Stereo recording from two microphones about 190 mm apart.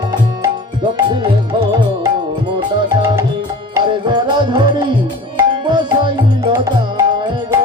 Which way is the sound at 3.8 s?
20° right (ahead or behind).